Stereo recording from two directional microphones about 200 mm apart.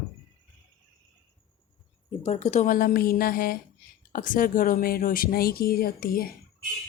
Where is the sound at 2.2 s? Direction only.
35° left (ahead or behind).